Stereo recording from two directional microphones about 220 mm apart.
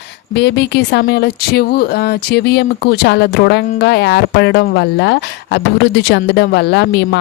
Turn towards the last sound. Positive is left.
turn(degrees=50)  # may be behind; listen again after turning